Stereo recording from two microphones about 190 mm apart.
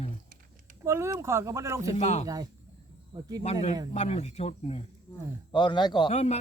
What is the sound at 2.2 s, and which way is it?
Speech, 20° right (ahead or behind).